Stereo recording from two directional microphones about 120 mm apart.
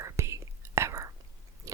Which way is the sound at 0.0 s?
25° right (ahead or behind).